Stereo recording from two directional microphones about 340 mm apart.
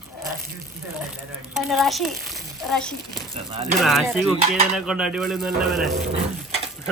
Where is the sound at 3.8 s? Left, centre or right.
Centre.